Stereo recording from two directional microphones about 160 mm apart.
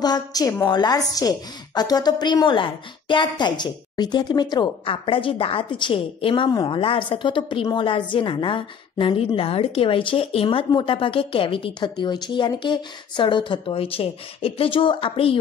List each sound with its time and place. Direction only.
0.0 s a woman's voice: 25° left (ahead or behind)